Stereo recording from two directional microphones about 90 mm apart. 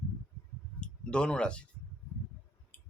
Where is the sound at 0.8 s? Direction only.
10° left (ahead or behind).